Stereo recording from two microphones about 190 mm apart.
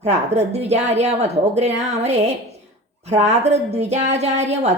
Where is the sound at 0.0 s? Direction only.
35° right (ahead or behind).